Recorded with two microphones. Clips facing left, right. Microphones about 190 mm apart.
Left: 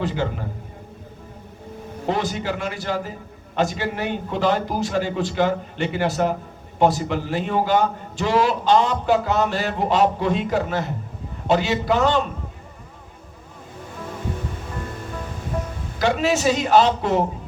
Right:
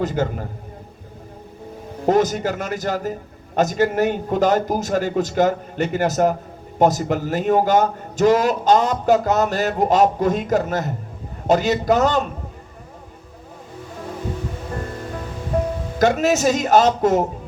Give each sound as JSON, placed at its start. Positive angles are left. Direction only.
{"t": 0.0, "sound": "a man's voice", "side_deg": -45}
{"t": 2.0, "sound": "a man's voice", "side_deg": -45}
{"t": 16.0, "sound": "a man's voice", "side_deg": -45}